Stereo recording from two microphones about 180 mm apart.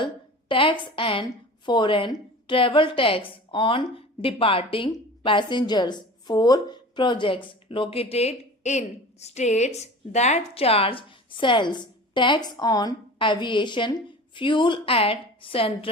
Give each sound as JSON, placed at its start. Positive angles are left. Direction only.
{"t": 0.0, "sound": "a woman's voice", "side_deg": 30}